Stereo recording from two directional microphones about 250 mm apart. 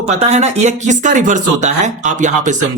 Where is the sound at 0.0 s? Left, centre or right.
Right.